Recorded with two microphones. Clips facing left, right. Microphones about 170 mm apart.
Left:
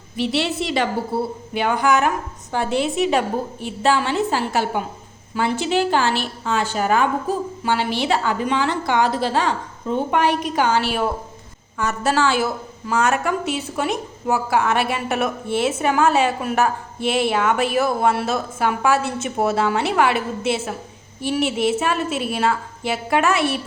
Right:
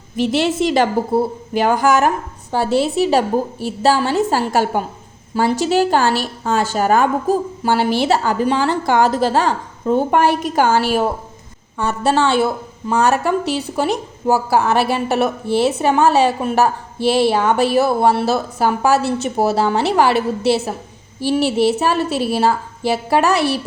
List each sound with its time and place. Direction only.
0.2 s a woman's voice: 45° right (ahead or behind)
11.8 s a woman's voice: 30° right (ahead or behind)